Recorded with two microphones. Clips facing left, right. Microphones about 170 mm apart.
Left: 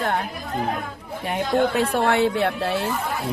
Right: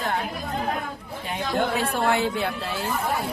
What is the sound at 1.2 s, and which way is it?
Speech, 65° left (ahead or behind).